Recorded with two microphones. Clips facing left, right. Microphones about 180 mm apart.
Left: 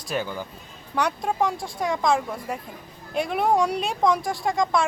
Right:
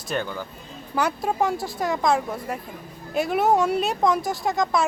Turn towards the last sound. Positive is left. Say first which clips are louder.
# even
turn(degrees=0)  # may be behind; listen again after turning